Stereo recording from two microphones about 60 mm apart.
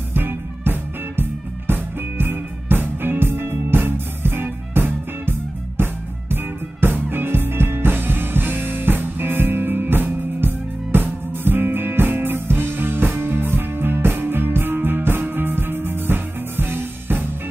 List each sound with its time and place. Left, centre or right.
0.1 s music: right